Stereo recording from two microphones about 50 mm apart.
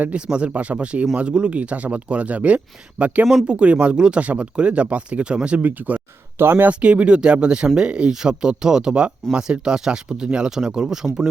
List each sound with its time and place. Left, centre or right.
0.3 s speech: right
5.6 s speech: right
6.4 s speech: right
6.7 s speech: right